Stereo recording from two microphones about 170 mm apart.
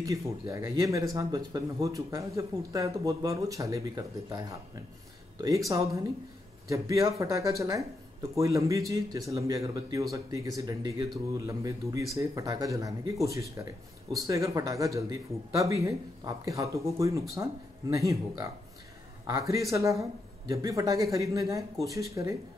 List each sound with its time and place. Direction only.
0.0 s speech: 20° right (ahead or behind)